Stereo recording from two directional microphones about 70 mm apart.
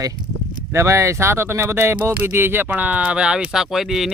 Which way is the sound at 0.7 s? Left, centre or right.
Right.